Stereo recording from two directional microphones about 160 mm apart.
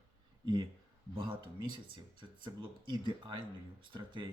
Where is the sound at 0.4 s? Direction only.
30° right (ahead or behind).